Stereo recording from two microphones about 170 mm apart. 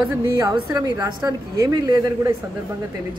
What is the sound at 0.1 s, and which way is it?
A woman's voice, 20° right (ahead or behind).